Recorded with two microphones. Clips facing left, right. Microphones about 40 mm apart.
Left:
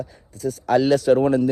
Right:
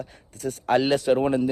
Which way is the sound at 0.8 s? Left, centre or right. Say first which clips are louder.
Left 5 dB; right.